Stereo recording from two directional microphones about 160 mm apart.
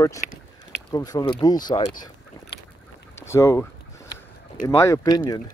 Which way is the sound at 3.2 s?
20° left (ahead or behind).